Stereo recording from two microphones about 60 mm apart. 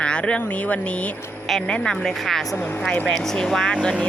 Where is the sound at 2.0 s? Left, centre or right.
Centre.